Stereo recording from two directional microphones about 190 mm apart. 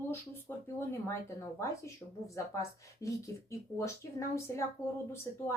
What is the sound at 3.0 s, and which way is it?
Speech, 15° left (ahead or behind).